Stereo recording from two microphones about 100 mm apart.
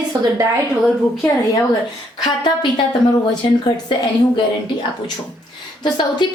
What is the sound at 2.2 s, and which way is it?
Speech, 45° left (ahead or behind).